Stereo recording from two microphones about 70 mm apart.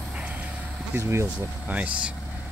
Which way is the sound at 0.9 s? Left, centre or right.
Right.